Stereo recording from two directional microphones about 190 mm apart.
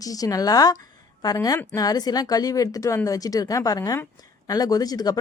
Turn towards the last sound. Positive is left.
turn(degrees=20)  # may be behind; listen again after turning